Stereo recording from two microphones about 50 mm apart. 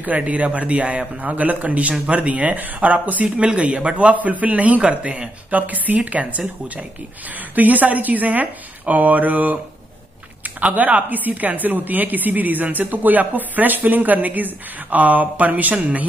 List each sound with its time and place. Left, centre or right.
0.0 s a man's voice: right
7.5 s a woman's voice: right